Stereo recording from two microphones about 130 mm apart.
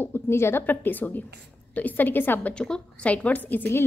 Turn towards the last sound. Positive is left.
turn(degrees=15)  # may be behind; listen again after turning